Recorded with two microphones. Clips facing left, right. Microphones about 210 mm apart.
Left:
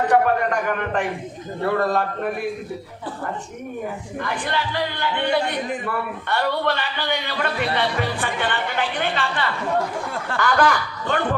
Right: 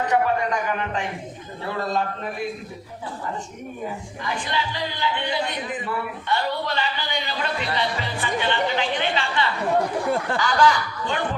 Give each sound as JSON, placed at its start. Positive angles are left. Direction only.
{"t": 0.1, "sound": "speech", "side_deg": 55}
{"t": 4.2, "sound": "speech", "side_deg": 55}